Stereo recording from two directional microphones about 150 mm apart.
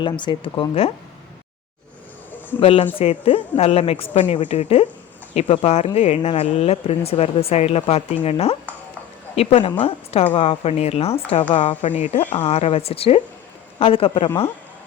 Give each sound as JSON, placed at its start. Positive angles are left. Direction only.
{"t": 0.0, "sound": "a woman's voice", "side_deg": 30}
{"t": 0.7, "sound": "speech", "side_deg": 40}
{"t": 2.6, "sound": "a woman's voice", "side_deg": 40}